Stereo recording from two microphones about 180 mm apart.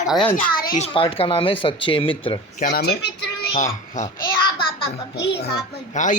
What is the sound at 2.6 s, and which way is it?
Speech, 60° left (ahead or behind).